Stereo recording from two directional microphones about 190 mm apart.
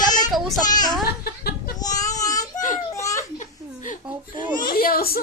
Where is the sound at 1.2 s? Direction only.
55° left (ahead or behind).